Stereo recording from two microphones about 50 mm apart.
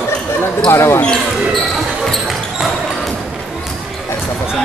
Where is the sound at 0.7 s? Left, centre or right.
Left.